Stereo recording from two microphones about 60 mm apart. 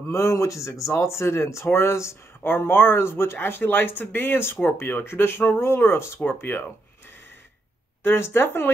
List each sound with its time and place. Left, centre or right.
0.1 s speech: left
8.0 s speech: left